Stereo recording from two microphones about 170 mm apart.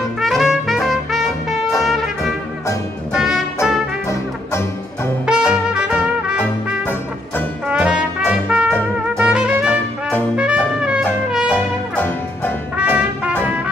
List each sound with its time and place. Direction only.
0.2 s music: centre (ahead or behind)
5.2 s brass instrument: 5° right (ahead or behind)
9.2 s music: 5° right (ahead or behind)
10.3 s trumpet: 5° right (ahead or behind)
11.5 s music: 10° left (ahead or behind)
12.7 s brass instrument: 5° right (ahead or behind)